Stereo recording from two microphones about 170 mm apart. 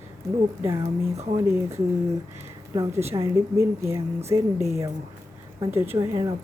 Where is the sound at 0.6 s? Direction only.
15° right (ahead or behind).